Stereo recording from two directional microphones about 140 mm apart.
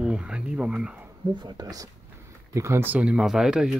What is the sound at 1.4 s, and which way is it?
Speech, 30° right (ahead or behind).